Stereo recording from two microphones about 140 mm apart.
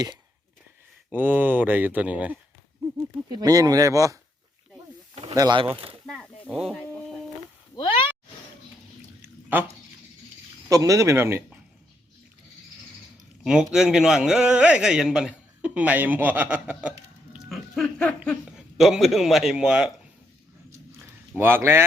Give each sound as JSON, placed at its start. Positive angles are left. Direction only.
{"t": 1.1, "sound": "speech", "side_deg": -15}
{"t": 3.2, "sound": "speech", "side_deg": -30}
{"t": 5.3, "sound": "speech", "side_deg": -25}
{"t": 5.7, "sound": "speech", "side_deg": -40}
{"t": 6.5, "sound": "a man's voice", "side_deg": 0}
{"t": 6.7, "sound": "a sound", "side_deg": 10}
{"t": 7.8, "sound": "a sound", "side_deg": 40}
{"t": 9.2, "sound": "a sound", "side_deg": -15}
{"t": 10.7, "sound": "speech", "side_deg": -25}
{"t": 13.4, "sound": "a man's voice", "side_deg": -5}
{"t": 17.3, "sound": "a sound", "side_deg": 0}
{"t": 18.5, "sound": "a man's voice", "side_deg": -5}
{"t": 21.3, "sound": "speech", "side_deg": -15}